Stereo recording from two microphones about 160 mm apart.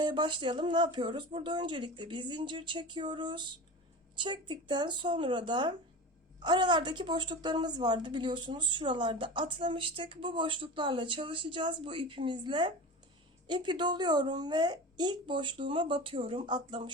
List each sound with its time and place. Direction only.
0.0 s a woman's voice: 30° right (ahead or behind)